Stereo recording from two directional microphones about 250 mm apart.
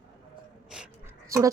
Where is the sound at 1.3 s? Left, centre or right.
Centre.